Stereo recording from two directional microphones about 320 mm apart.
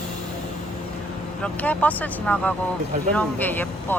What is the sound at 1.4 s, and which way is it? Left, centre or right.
Speech, centre.